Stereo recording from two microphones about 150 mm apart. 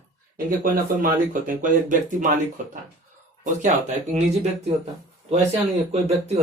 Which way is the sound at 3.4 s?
50° right (ahead or behind).